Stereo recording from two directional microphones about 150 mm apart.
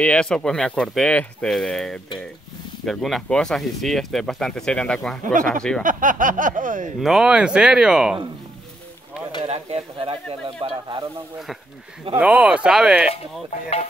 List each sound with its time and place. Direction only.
0.0 s speech: 5° left (ahead or behind)
5.8 s speech: 65° right (ahead or behind)
7.0 s speech: 5° right (ahead or behind)
9.4 s speech: 40° right (ahead or behind)
12.2 s speech: 10° right (ahead or behind)